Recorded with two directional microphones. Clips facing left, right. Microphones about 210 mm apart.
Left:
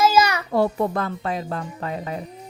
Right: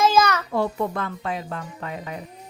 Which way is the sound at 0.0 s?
10° left (ahead or behind).